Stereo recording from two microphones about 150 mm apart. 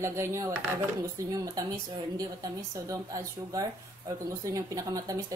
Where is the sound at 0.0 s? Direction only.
20° right (ahead or behind).